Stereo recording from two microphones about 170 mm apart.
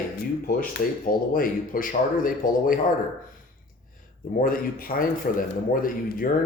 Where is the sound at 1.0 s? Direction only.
55° left (ahead or behind).